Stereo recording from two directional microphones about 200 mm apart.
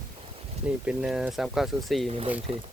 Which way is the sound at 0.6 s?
5° right (ahead or behind).